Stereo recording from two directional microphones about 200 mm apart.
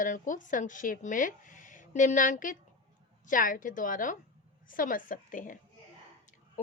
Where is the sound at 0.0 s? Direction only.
40° left (ahead or behind).